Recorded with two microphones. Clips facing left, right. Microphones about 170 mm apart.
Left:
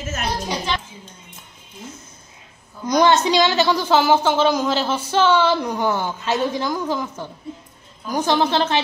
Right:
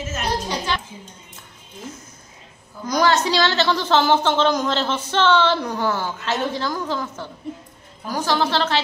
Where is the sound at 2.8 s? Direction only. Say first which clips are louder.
Left 3 dB; 20° left (ahead or behind).